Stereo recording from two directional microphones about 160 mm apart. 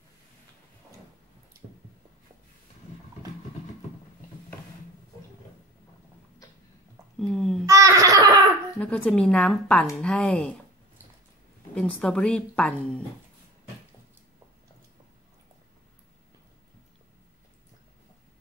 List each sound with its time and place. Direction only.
7.2 s babbling: 5° left (ahead or behind)
7.6 s a sound: 20° right (ahead or behind)
8.7 s speech: 5° left (ahead or behind)
11.7 s speech: 5° left (ahead or behind)